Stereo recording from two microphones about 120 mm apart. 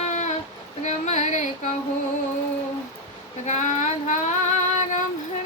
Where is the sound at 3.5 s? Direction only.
85° left.